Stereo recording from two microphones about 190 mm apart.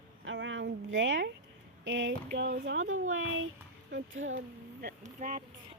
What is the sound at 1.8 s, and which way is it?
Speech, 75° right (ahead or behind).